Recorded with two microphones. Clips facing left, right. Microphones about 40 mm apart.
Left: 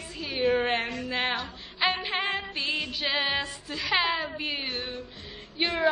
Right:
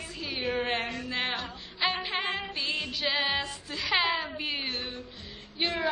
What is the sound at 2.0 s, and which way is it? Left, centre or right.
Music, centre.